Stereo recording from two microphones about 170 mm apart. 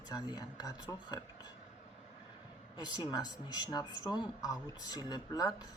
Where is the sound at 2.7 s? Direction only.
25° left (ahead or behind).